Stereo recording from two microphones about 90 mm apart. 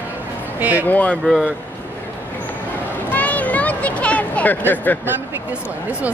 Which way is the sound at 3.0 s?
20° left (ahead or behind).